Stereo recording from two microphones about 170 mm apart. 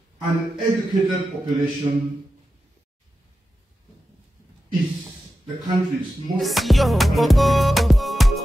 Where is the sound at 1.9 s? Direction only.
30° right (ahead or behind).